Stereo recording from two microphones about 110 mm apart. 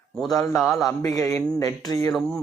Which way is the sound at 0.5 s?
Centre (ahead or behind).